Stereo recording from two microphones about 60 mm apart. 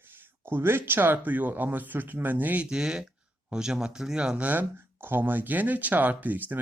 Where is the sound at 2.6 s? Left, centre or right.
Centre.